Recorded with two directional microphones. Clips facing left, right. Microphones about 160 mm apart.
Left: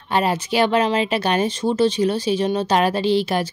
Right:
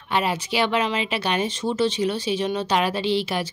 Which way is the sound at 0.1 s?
40° left (ahead or behind).